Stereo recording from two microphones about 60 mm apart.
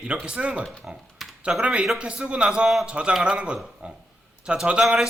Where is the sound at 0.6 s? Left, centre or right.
Centre.